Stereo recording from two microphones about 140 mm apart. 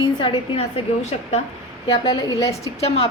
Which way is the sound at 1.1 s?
45° left (ahead or behind).